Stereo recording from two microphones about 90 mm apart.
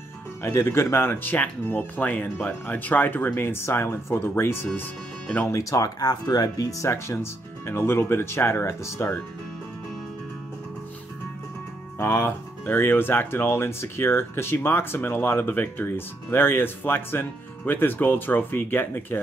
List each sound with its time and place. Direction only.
0.4 s speech: 30° left (ahead or behind)
6.9 s speech: 30° left (ahead or behind)
12.0 s speech: 25° left (ahead or behind)